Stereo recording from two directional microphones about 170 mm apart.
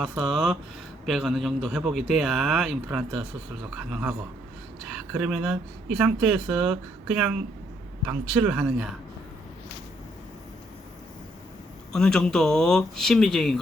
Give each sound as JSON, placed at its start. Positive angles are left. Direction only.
{"t": 0.0, "sound": "a man's voice", "side_deg": 0}
{"t": 11.9, "sound": "a man's voice", "side_deg": 5}